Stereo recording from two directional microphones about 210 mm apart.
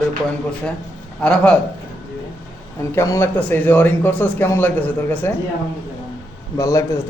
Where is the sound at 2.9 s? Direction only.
10° left (ahead or behind).